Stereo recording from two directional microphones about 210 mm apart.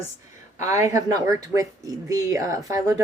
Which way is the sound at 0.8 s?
15° right (ahead or behind).